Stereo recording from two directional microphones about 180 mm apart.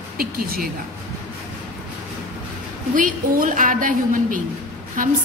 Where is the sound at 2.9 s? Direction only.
50° right (ahead or behind).